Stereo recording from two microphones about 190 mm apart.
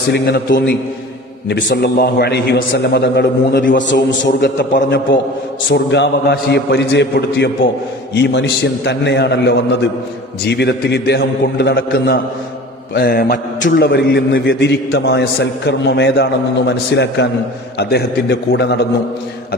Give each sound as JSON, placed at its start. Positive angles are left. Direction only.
{"t": 0.1, "sound": "a man's voice", "side_deg": 60}